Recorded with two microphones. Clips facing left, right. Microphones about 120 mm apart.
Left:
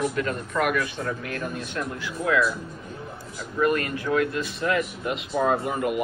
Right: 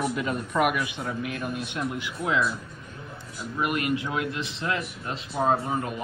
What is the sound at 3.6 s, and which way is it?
A man's voice, 15° right (ahead or behind).